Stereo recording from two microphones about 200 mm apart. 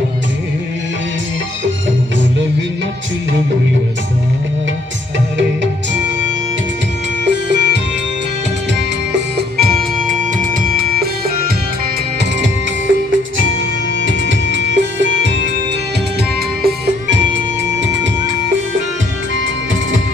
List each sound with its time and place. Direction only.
7.2 s music: 60° right (ahead or behind)
9.1 s music: 45° right (ahead or behind)
14.0 s music: 65° right (ahead or behind)
16.6 s music: 55° right (ahead or behind)